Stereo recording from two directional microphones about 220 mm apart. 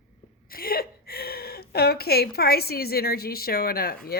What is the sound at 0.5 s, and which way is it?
A woman's voice, 45° left (ahead or behind).